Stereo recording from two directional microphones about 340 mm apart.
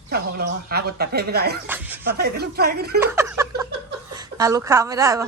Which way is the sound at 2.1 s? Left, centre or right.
Right.